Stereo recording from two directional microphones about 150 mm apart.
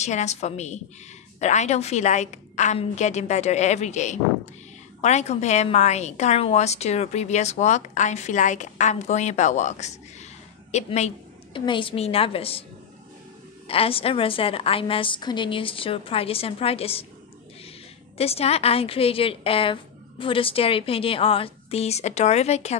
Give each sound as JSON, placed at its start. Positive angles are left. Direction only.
{"t": 0.0, "sound": "a woman's voice", "side_deg": 50}
{"t": 11.5, "sound": "a woman's voice", "side_deg": 35}
{"t": 13.7, "sound": "a woman's voice", "side_deg": 40}
{"t": 18.1, "sound": "a woman's voice", "side_deg": 40}